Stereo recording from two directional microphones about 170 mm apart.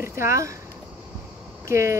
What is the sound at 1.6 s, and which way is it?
Speech, 15° right (ahead or behind).